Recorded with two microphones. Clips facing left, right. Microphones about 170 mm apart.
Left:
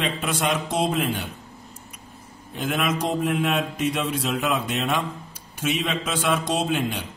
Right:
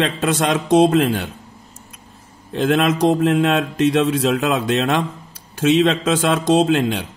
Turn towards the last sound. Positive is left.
turn(degrees=-90)